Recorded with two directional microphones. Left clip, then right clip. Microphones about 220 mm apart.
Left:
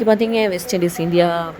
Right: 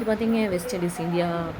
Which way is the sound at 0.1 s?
35° left (ahead or behind).